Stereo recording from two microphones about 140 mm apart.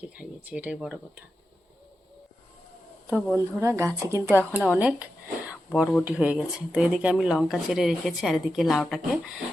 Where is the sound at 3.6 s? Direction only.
20° right (ahead or behind).